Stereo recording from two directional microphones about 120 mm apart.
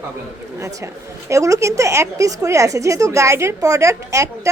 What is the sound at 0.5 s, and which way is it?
A woman's voice, 25° right (ahead or behind).